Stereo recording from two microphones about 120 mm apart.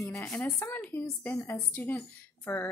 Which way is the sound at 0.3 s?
10° left (ahead or behind).